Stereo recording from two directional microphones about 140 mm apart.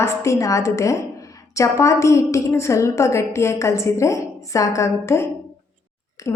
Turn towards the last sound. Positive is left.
turn(degrees=20)  # may be behind; listen again after turning